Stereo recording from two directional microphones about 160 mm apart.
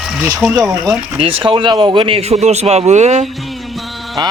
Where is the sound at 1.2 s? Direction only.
35° right (ahead or behind).